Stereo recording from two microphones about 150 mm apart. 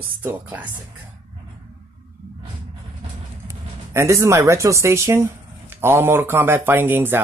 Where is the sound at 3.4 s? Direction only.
20° right (ahead or behind).